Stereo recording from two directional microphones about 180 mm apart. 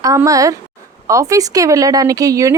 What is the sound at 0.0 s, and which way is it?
A woman's voice, 20° right (ahead or behind).